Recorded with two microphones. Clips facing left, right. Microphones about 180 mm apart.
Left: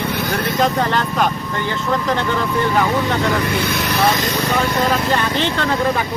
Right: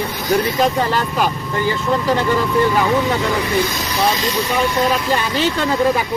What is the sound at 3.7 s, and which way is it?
Speech, 60° left (ahead or behind).